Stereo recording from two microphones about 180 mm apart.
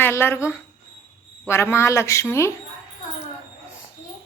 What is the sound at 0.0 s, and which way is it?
Speech, 15° left (ahead or behind).